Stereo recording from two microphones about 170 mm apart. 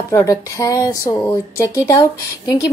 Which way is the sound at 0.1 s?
20° left (ahead or behind).